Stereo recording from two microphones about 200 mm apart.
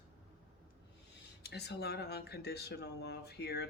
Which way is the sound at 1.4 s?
55° left (ahead or behind).